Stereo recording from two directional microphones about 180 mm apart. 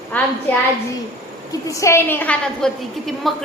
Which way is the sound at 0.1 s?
10° left (ahead or behind).